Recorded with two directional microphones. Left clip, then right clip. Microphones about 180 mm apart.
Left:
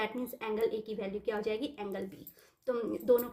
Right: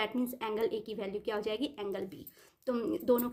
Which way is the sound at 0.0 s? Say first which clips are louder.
Right 2 dB; 40° right (ahead or behind).